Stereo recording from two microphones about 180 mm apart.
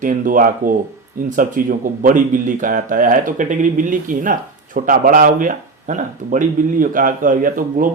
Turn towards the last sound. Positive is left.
turn(degrees=-50)  # may be behind; listen again after turning